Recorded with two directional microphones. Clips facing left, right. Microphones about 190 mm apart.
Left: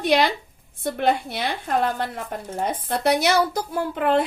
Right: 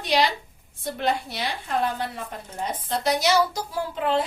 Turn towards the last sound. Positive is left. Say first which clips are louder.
# left 4 dB
turn(degrees=55)  # may be behind; listen again after turning